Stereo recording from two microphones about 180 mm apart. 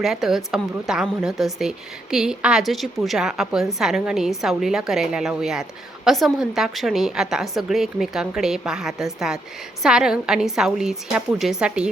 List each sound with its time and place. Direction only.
0.0 s a woman's voice: centre (ahead or behind)